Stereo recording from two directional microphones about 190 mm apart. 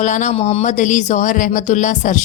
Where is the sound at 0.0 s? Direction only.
40° left (ahead or behind).